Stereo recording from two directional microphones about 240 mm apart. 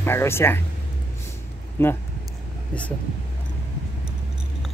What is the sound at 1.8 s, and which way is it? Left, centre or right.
Speech, centre.